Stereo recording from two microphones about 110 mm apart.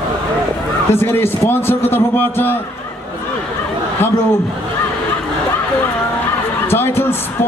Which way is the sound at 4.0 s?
20° left (ahead or behind).